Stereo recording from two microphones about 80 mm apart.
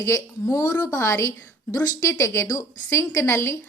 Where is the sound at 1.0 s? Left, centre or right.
Left.